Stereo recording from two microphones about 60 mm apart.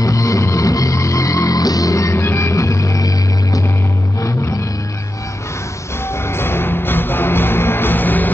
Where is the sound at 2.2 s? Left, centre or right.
Left.